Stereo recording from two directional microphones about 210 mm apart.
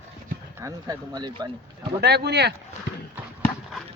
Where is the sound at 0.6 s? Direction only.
15° right (ahead or behind).